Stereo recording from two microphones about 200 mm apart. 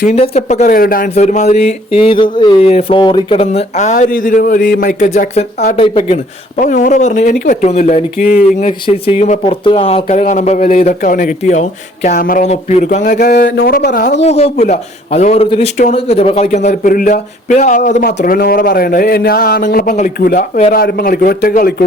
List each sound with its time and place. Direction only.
0.0 s speech: 35° left (ahead or behind)
6.6 s speech: 40° left (ahead or behind)
14.2 s speech: 30° left (ahead or behind); by 21.8 s 45° left (ahead or behind)